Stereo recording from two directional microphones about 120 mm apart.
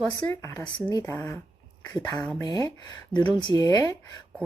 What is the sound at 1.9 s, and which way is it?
Speech, 25° left (ahead or behind).